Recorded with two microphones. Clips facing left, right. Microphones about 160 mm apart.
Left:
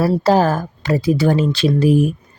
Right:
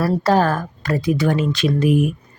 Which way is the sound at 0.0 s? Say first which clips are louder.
Left 2 dB; 25° left (ahead or behind).